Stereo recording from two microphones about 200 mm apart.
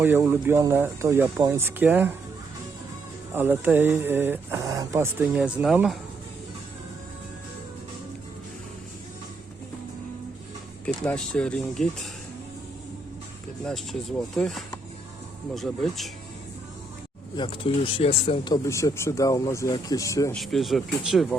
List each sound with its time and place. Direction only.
0.0 s speech: 10° right (ahead or behind)
3.3 s speech: 10° right (ahead or behind)
10.8 s speech: 5° left (ahead or behind)
13.7 s speech: 5° left (ahead or behind)
17.3 s speech: 25° left (ahead or behind)
20.3 s speech: centre (ahead or behind)